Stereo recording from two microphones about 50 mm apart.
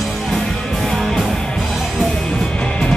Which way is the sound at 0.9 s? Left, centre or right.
Centre.